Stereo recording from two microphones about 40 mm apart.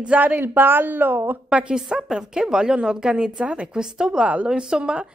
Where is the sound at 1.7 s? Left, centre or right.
Centre.